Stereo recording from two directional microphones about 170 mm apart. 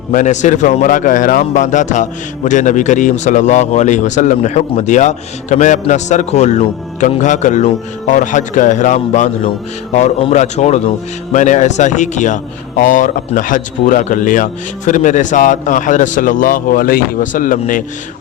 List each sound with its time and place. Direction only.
0.1 s a man's voice: 50° left (ahead or behind)